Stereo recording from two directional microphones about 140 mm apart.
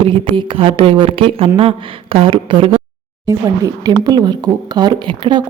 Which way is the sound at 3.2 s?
25° right (ahead or behind).